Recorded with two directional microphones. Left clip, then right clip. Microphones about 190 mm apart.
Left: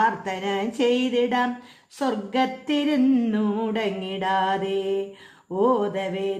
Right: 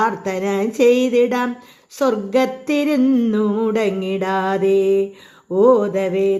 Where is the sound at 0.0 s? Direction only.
30° right (ahead or behind).